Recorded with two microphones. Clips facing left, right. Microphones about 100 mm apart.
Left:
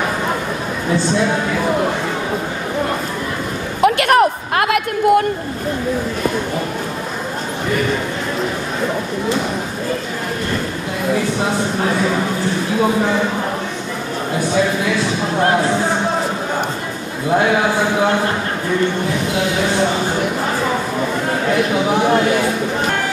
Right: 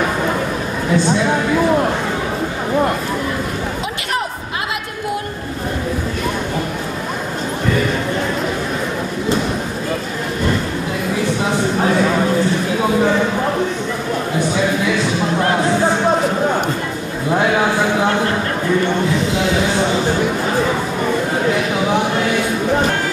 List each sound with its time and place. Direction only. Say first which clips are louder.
3.8 s a woman's voice: left 10 dB; 60° left (ahead or behind)